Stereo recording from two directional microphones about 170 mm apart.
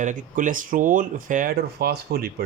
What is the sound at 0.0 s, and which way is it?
A man's voice, 45° right (ahead or behind).